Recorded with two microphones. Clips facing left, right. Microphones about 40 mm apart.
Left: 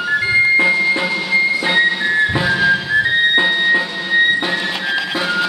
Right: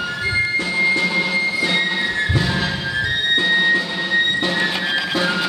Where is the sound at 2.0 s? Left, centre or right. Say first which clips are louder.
Left 5 dB; centre.